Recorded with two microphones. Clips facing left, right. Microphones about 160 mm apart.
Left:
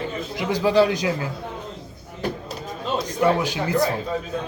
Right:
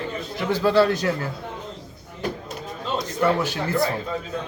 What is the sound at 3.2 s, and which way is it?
Speech, 15° left (ahead or behind).